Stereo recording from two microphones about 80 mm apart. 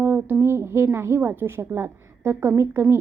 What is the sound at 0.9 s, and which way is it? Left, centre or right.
A woman's voice, right.